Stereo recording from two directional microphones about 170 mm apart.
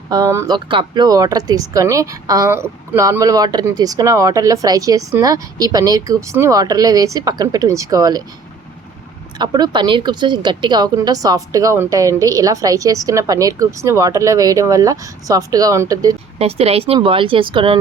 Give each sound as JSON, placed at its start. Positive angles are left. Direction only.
{"t": 0.1, "sound": "speech", "side_deg": -20}
{"t": 9.4, "sound": "speech", "side_deg": -25}
{"t": 16.4, "sound": "speech", "side_deg": -35}